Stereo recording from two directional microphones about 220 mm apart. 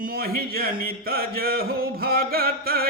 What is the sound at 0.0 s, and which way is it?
Mantra, 45° right (ahead or behind).